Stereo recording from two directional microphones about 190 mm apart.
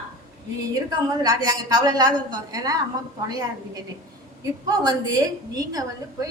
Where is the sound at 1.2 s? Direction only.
20° right (ahead or behind).